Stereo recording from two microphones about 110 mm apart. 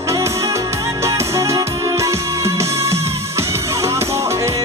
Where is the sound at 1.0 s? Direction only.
25° right (ahead or behind).